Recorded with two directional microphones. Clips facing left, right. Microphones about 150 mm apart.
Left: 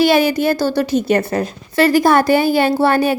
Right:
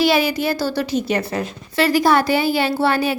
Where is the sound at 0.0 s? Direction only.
50° left (ahead or behind).